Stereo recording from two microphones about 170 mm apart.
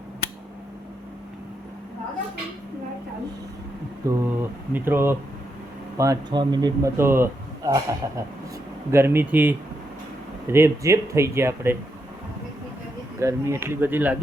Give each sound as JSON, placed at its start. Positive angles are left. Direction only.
{"t": 4.0, "sound": "speech", "side_deg": -20}
{"t": 13.1, "sound": "speech", "side_deg": -15}